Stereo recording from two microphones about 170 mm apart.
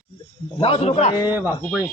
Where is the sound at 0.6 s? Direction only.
35° left (ahead or behind).